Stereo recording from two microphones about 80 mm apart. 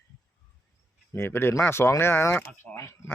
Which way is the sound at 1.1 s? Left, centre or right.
Left.